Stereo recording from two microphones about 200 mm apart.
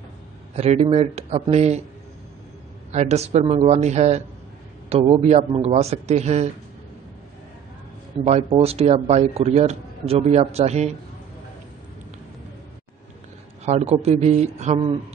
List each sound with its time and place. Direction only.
0.6 s speech: 30° right (ahead or behind)
2.9 s a man's voice: 35° right (ahead or behind)
8.2 s speech: 30° right (ahead or behind)
13.7 s speech: 30° right (ahead or behind)